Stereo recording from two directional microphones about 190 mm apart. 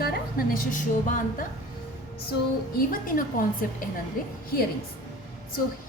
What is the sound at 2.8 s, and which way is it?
A woman's voice, 45° left (ahead or behind).